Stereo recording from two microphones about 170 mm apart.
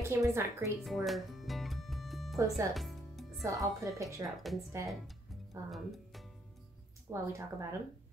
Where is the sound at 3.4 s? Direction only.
20° right (ahead or behind).